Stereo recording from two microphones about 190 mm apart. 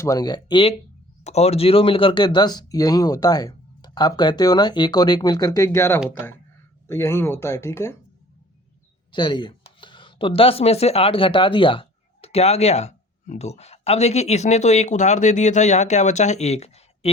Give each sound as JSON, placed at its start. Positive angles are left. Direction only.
{"t": 0.0, "sound": "speech", "side_deg": 20}
{"t": 9.1, "sound": "speech", "side_deg": 25}